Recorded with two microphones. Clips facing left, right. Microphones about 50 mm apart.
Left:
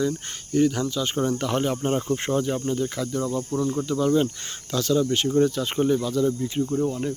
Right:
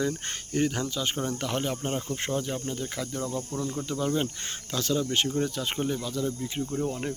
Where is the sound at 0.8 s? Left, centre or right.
Centre.